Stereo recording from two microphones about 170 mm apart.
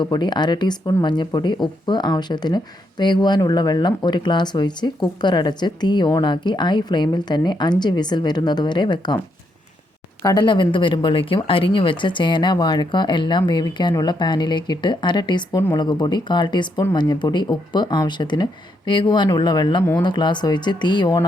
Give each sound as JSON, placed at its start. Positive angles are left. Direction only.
{"t": 0.0, "sound": "speech", "side_deg": 25}
{"t": 10.2, "sound": "speech", "side_deg": 25}